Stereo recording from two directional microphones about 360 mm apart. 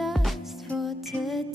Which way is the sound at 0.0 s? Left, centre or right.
Centre.